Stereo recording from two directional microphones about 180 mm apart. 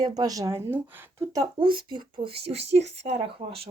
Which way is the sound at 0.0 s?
20° right (ahead or behind).